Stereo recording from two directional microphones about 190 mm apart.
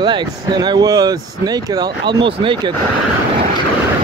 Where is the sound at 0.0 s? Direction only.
25° right (ahead or behind).